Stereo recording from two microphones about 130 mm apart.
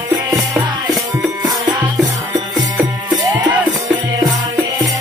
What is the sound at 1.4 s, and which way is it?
Music, 35° right (ahead or behind).